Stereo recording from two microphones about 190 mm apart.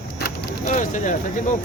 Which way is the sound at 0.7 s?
40° left (ahead or behind).